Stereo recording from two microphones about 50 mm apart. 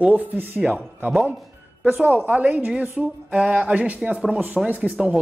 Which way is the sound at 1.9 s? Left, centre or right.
Right.